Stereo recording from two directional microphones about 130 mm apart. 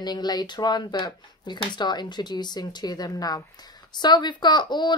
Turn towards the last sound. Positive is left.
turn(degrees=35)  # may be behind; listen again after turning